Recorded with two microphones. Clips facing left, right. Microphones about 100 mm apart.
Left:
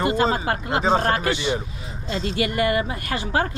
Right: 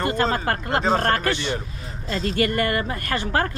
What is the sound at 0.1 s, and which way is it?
Speech, 40° right (ahead or behind).